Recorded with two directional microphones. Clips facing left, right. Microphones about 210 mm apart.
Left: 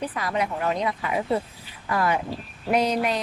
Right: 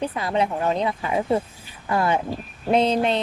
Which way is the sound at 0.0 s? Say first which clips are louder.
Right 4 dB; 25° right (ahead or behind).